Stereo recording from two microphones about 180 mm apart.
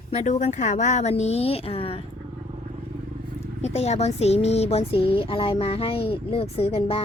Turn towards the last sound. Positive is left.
turn(degrees=30)  # may be behind; listen again after turning